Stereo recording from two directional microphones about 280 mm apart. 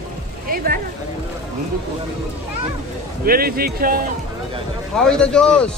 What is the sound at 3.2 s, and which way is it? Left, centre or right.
Speech, right.